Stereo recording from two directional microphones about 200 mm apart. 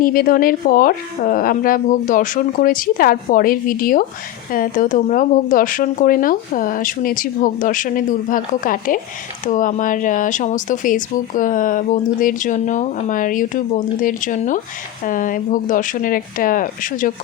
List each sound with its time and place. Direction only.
0.0 s speech: 45° left (ahead or behind)